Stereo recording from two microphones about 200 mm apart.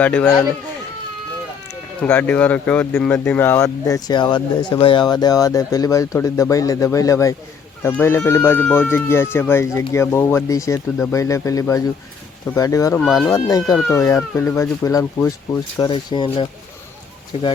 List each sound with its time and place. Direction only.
0.0 s speech: 5° left (ahead or behind)
2.0 s speech: 10° left (ahead or behind)
13.0 s speech: centre (ahead or behind)
13.3 s speech: 15° left (ahead or behind)